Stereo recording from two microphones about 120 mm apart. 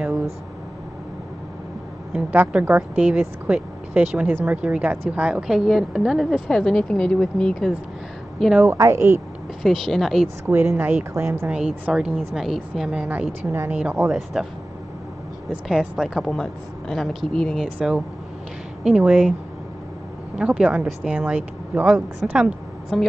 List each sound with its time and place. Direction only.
2.1 s speech: 10° right (ahead or behind); by 7.7 s 5° left (ahead or behind)
8.4 s speech: 5° right (ahead or behind)
8.6 s speech: 25° right (ahead or behind)
9.6 s speech: centre (ahead or behind)
10.4 s speech: 20° right (ahead or behind)
11.4 s speech: 10° right (ahead or behind)
13.9 s speech: centre (ahead or behind)
17.7 s speech: 5° right (ahead or behind)
20.3 s a woman's voice: 5° right (ahead or behind)